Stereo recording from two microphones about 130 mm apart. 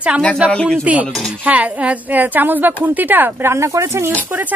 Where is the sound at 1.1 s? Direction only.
5° left (ahead or behind).